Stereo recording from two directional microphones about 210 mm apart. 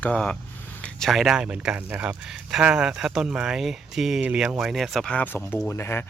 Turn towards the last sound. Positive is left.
turn(degrees=10)  # may be behind; listen again after turning